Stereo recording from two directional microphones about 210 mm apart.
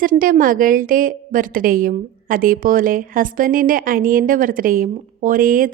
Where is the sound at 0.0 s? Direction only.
40° right (ahead or behind).